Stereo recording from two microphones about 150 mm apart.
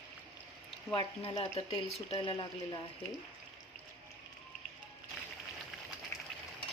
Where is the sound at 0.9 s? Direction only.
35° left (ahead or behind).